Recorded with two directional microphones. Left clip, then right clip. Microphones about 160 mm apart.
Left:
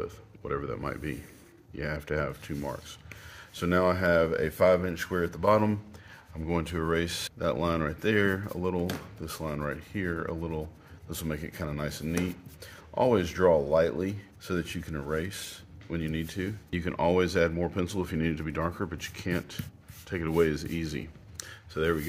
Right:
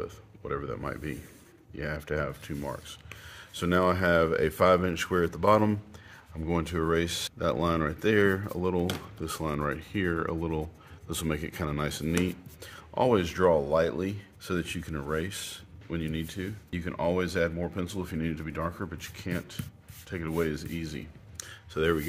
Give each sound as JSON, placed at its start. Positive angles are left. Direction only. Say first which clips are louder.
{"t": 0.0, "sound": "speech", "louder": "left 1 dB", "side_deg": 0}
{"t": 12.6, "sound": "speech", "louder": "even", "side_deg": -20}
{"t": 15.9, "sound": "speech", "louder": "even", "side_deg": 5}
{"t": 16.3, "sound": "speech", "louder": "left 3 dB", "side_deg": 20}
{"t": 21.7, "sound": "speech", "louder": "right 1 dB", "side_deg": -15}